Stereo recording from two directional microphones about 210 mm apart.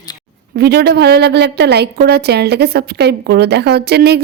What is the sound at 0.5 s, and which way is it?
A woman's voice, 50° right (ahead or behind).